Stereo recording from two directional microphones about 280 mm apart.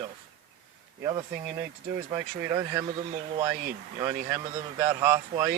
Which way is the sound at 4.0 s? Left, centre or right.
Centre.